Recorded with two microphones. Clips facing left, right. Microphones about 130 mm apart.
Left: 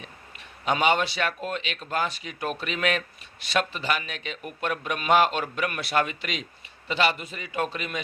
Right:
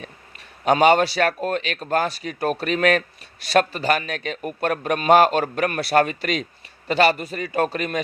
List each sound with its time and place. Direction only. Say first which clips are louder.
0.0 s a man's voice: right 4 dB; 45° right (ahead or behind)